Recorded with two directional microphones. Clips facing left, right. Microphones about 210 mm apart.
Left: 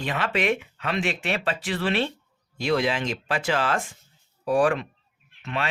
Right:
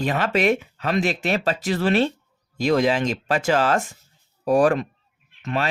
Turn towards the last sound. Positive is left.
turn(degrees=-40)  # may be behind; listen again after turning